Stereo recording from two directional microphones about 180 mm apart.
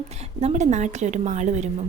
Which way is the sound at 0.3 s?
40° right (ahead or behind).